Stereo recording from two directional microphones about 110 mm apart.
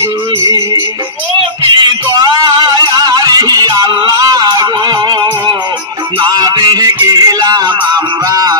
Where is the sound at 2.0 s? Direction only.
35° right (ahead or behind).